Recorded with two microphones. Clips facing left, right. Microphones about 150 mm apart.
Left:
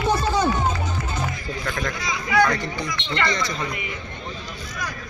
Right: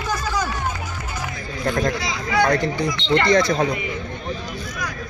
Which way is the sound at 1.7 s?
35° right (ahead or behind).